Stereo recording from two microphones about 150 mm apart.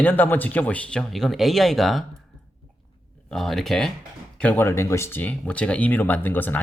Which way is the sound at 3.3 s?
Centre (ahead or behind).